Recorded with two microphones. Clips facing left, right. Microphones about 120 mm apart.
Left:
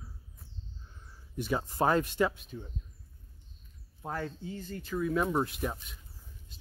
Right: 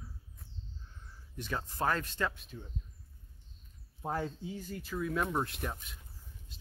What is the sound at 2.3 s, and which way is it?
Speech, centre (ahead or behind).